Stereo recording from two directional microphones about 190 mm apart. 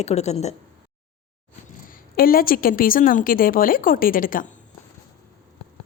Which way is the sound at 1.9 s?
50° left (ahead or behind).